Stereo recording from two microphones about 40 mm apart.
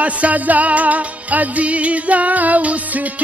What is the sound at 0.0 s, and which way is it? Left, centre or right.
Music, right.